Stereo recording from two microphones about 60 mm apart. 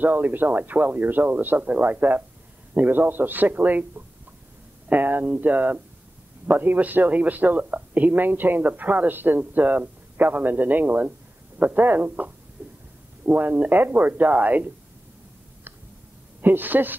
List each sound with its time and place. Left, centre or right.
0.0 s speech: right
12.6 s a sound: right
13.2 s speech: right
16.3 s speech: right